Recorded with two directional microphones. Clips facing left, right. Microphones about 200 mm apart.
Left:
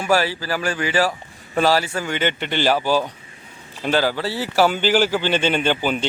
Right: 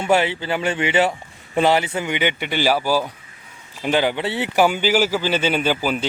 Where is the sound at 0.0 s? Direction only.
20° right (ahead or behind).